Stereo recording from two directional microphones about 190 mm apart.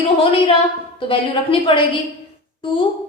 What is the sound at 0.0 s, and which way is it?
A woman's voice, 30° left (ahead or behind).